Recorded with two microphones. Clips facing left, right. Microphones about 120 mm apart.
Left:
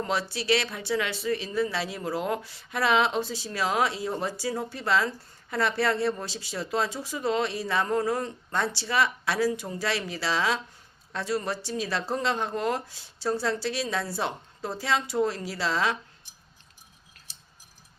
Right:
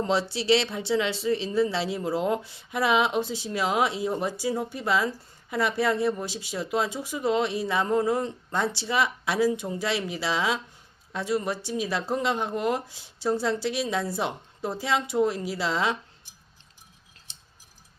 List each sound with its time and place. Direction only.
0.0 s speech: 25° right (ahead or behind)
17.3 s scissors: 20° right (ahead or behind)